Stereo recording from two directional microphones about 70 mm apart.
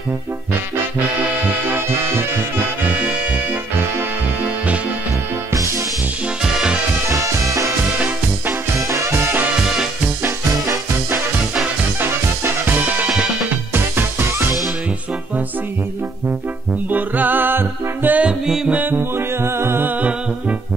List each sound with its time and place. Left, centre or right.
1.7 s music: right
2.9 s music: centre
5.5 s music: right
7.1 s music: right
8.8 s music: right
12.6 s music: right
13.1 s music: centre
13.7 s music: right
16.9 s music: right
18.2 s music: centre
18.7 s music: right
20.0 s music: centre